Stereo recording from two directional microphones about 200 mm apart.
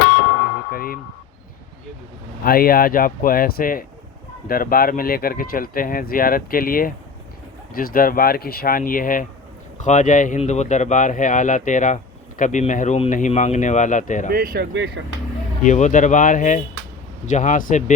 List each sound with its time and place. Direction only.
0.7 s vehicle: 45° left (ahead or behind)
2.4 s speech: 45° left (ahead or behind)
14.3 s speech: 50° right (ahead or behind)
15.6 s speech: 35° left (ahead or behind)